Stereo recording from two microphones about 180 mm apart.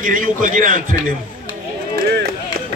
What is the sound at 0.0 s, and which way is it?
Speech, 50° right (ahead or behind).